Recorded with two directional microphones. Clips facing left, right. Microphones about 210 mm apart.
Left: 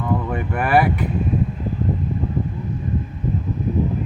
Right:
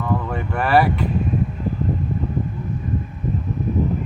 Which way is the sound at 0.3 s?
15° left (ahead or behind).